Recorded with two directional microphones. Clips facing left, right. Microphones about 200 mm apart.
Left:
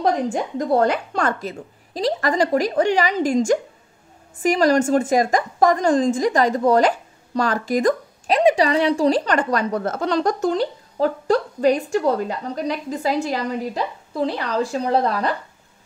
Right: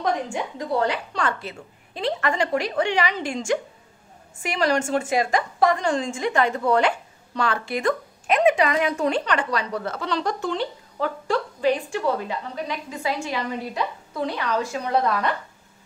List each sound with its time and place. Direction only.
0.0 s a woman's voice: 40° left (ahead or behind)